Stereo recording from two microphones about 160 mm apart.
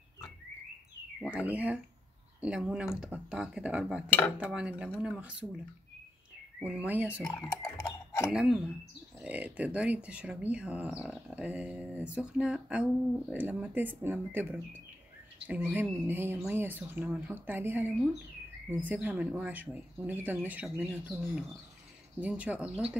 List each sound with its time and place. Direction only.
1.2 s speech: 10° right (ahead or behind)
6.6 s speech: 10° right (ahead or behind)
7.6 s a sound: 20° left (ahead or behind)
8.3 s speech: 5° right (ahead or behind)